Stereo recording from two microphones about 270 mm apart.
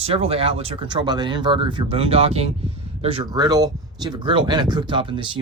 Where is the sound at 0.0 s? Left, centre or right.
Right.